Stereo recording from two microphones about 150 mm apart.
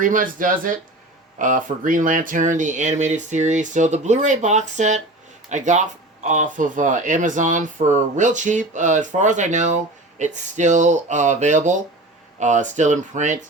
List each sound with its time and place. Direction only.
0.0 s speech: 65° right (ahead or behind)